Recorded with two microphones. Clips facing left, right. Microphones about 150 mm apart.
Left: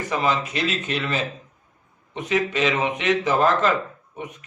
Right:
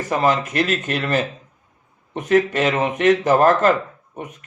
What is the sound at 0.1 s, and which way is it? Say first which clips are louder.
A man's voice: right 5 dB; 50° right (ahead or behind).